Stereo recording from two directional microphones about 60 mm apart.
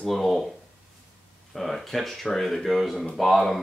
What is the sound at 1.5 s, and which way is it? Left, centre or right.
Speech, centre.